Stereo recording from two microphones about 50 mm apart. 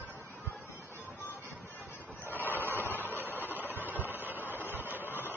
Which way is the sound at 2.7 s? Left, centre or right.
Right.